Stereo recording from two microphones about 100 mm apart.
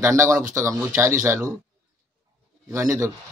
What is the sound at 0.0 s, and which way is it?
A man's voice, 30° right (ahead or behind).